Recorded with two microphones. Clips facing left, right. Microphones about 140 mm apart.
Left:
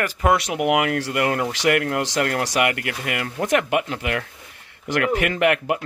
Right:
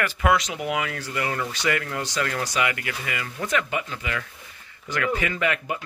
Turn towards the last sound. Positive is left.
turn(degrees=70)  # may be behind; listen again after turning